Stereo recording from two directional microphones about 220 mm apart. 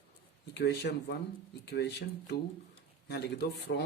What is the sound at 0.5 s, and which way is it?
Speech, 50° left (ahead or behind).